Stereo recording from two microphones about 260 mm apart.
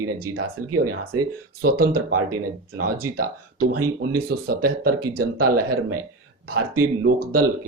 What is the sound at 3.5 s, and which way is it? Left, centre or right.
Speech, right.